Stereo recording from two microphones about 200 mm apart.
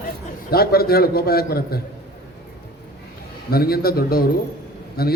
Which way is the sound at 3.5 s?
50° left (ahead or behind).